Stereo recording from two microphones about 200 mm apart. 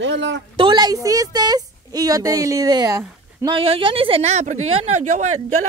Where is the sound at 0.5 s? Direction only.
20° right (ahead or behind).